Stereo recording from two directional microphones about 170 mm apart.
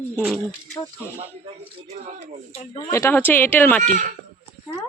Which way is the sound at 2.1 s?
40° right (ahead or behind).